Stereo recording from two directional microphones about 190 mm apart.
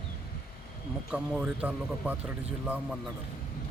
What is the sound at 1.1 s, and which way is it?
Speech, 5° right (ahead or behind).